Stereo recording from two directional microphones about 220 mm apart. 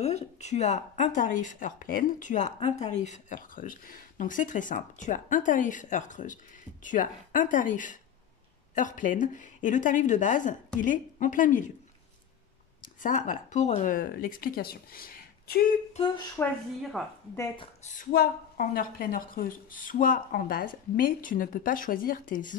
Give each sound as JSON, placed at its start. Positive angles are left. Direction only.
{"t": 0.0, "sound": "speech", "side_deg": 30}
{"t": 12.8, "sound": "speech", "side_deg": 35}
{"t": 16.4, "sound": "a woman's voice", "side_deg": 10}
{"t": 17.0, "sound": "a woman's voice", "side_deg": 0}
{"t": 17.8, "sound": "speech", "side_deg": 40}